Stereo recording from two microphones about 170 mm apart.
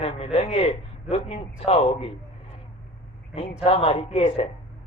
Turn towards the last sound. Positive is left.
turn(degrees=35)  # may be behind; listen again after turning